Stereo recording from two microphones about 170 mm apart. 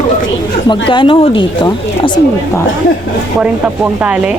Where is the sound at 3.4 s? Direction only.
10° right (ahead or behind).